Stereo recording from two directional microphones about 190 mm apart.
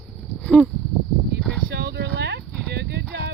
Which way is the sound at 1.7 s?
60° right (ahead or behind).